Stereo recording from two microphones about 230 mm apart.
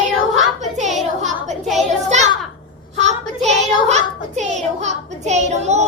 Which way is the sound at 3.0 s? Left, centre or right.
Right.